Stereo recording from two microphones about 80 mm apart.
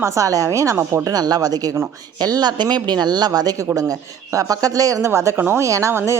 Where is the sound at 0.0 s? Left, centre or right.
Right.